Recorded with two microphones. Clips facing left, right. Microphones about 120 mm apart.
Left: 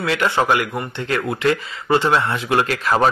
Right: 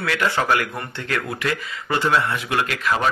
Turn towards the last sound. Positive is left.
turn(degrees=35)  # may be behind; listen again after turning